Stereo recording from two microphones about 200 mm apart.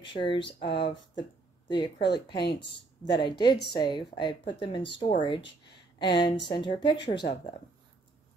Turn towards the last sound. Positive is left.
turn(degrees=20)  # may be behind; listen again after turning